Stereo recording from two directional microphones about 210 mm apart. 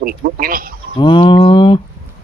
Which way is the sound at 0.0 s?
45° right (ahead or behind).